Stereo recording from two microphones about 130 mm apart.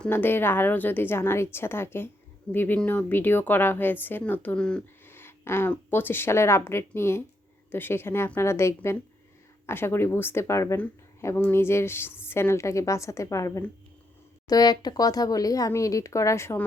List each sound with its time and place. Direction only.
0.0 s a woman's voice: 15° left (ahead or behind)
5.0 s a woman's voice: 20° left (ahead or behind)